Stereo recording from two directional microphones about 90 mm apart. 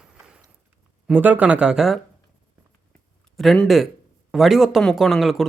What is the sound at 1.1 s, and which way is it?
Speech, 20° right (ahead or behind).